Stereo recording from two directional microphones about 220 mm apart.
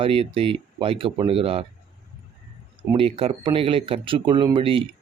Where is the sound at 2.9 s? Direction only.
25° right (ahead or behind).